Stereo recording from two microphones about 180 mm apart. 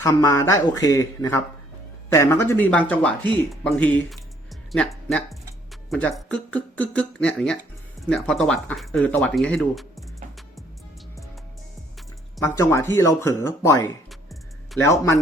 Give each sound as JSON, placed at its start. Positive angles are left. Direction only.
{"t": 0.0, "sound": "speech", "side_deg": 20}
{"t": 12.4, "sound": "speech", "side_deg": 15}
{"t": 14.1, "sound": "music", "side_deg": 0}
{"t": 14.8, "sound": "speech", "side_deg": 15}